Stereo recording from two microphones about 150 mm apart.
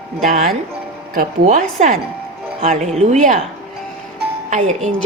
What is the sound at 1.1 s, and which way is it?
A woman's voice, 60° right (ahead or behind).